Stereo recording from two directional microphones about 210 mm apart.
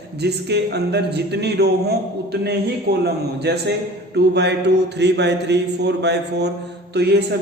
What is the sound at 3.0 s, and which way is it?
A man's voice, 50° right (ahead or behind).